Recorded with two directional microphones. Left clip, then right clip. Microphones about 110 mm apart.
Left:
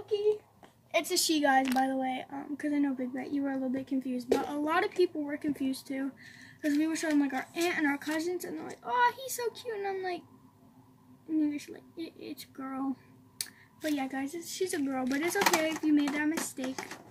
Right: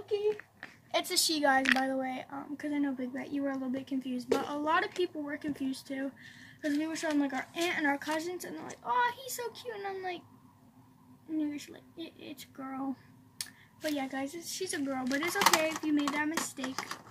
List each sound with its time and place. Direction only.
0.9 s a woman's voice: 15° right (ahead or behind)
3.2 s speech: 25° right (ahead or behind)
11.3 s speech: 15° right (ahead or behind)
13.9 s speech: 25° right (ahead or behind)